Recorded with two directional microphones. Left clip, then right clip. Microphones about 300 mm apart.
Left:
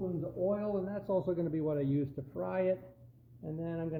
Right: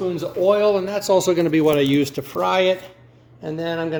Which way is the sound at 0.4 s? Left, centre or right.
Right.